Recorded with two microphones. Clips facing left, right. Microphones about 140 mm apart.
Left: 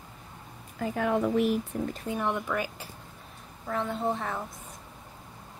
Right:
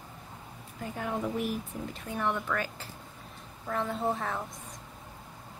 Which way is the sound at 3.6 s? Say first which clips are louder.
Left 1 dB; centre (ahead or behind).